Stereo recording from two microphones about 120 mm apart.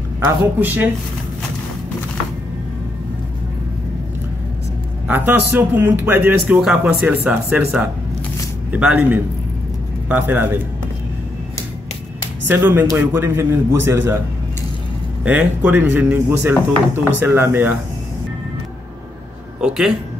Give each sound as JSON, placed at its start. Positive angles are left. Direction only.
{"t": 0.6, "sound": "a man's voice", "side_deg": -15}
{"t": 5.0, "sound": "a man's voice", "side_deg": -15}
{"t": 12.4, "sound": "a man's voice", "side_deg": -15}
{"t": 15.2, "sound": "a man's voice", "side_deg": -10}
{"t": 19.6, "sound": "a man's voice", "side_deg": -5}